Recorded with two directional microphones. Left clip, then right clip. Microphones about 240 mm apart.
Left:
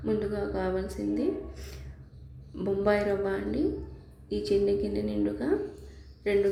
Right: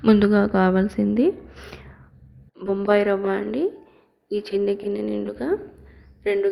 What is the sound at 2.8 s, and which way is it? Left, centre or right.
Speech, centre.